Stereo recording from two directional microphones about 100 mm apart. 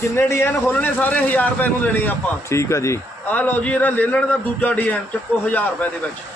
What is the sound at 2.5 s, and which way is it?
Speech, 30° left (ahead or behind).